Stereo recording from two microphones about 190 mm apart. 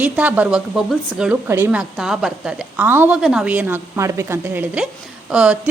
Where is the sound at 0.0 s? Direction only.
10° right (ahead or behind).